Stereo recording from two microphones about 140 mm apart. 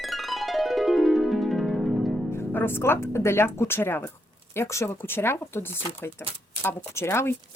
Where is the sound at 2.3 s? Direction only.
15° left (ahead or behind).